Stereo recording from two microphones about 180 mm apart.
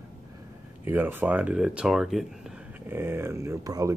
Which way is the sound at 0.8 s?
10° right (ahead or behind).